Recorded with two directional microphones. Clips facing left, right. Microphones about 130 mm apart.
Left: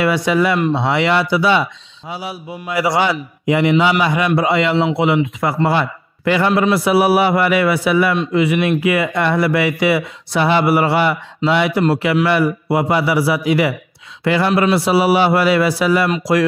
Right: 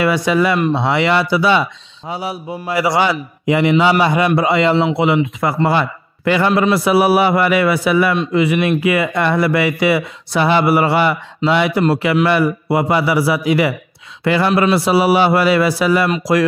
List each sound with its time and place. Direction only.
0.0 s a man's voice: 40° right (ahead or behind)